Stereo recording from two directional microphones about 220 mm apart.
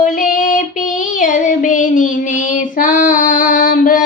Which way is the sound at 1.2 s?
35° left (ahead or behind).